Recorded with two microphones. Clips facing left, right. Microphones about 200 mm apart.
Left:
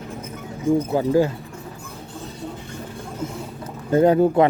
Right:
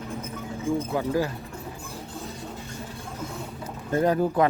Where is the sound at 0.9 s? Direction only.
25° left (ahead or behind).